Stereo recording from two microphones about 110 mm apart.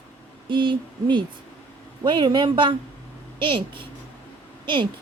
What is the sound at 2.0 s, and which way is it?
A child's voice, 45° right (ahead or behind).